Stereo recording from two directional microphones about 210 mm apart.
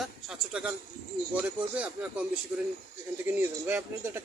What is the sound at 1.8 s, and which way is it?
A man's voice, 5° right (ahead or behind).